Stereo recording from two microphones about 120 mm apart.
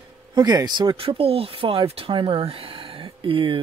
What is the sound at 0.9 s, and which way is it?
Speech, 50° right (ahead or behind).